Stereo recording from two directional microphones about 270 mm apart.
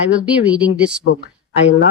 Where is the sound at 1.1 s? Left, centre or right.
Left.